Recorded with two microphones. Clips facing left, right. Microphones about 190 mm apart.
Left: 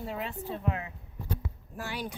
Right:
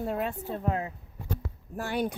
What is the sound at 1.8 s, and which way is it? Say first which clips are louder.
Speech: right 7 dB; 55° right (ahead or behind).